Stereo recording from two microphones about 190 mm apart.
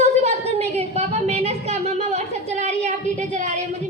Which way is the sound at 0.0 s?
35° right (ahead or behind).